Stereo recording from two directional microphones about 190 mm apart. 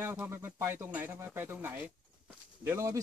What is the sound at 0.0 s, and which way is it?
Speech, 10° right (ahead or behind).